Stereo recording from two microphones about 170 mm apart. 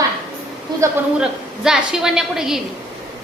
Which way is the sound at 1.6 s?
5° right (ahead or behind).